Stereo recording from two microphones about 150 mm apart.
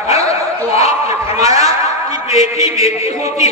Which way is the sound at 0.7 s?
45° left (ahead or behind).